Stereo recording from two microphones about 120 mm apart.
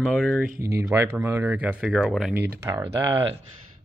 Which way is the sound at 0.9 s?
20° right (ahead or behind).